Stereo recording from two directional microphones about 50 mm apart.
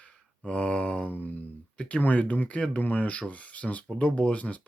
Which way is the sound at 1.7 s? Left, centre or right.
Left.